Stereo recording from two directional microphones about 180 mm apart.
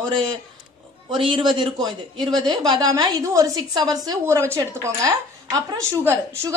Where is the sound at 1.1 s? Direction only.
25° right (ahead or behind).